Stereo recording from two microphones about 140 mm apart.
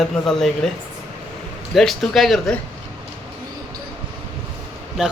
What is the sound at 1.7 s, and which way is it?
Speech, centre (ahead or behind).